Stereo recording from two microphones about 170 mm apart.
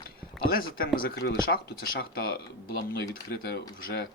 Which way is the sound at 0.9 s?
65° left (ahead or behind).